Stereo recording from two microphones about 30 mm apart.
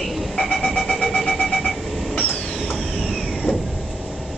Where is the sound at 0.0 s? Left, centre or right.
Centre.